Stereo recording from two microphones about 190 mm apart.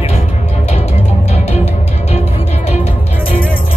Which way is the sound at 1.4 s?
35° left (ahead or behind).